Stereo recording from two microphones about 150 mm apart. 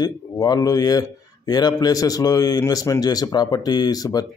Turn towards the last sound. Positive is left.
turn(degrees=25)  # may be behind; listen again after turning